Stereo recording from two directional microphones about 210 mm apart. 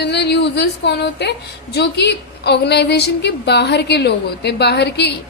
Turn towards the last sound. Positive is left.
turn(degrees=50)  # may be behind; listen again after turning